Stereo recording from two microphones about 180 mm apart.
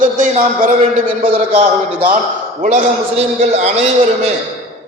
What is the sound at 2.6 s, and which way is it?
A man's voice, 45° right (ahead or behind).